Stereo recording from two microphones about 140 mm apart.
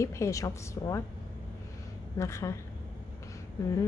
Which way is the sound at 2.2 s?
20° left (ahead or behind).